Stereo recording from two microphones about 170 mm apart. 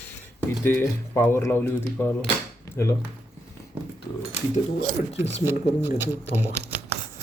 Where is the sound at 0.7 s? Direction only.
10° left (ahead or behind).